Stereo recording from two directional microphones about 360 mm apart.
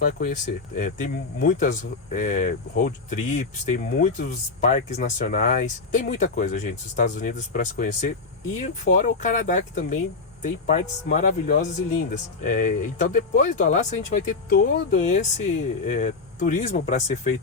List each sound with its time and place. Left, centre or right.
0.0 s speech: left